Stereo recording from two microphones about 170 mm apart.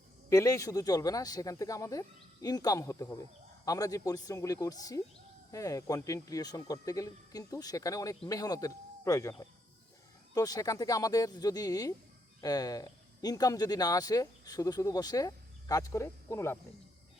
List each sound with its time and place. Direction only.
0.3 s speech: 20° left (ahead or behind)
10.3 s speech: 20° left (ahead or behind)